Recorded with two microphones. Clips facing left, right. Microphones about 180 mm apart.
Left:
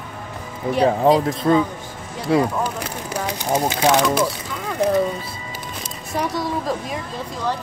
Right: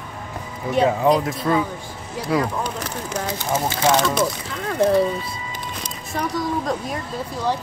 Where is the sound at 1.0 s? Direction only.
25° left (ahead or behind).